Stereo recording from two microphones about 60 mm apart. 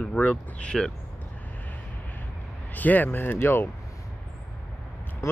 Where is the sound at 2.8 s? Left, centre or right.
Left.